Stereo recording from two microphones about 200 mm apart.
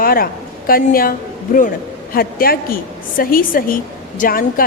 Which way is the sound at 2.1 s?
45° left (ahead or behind).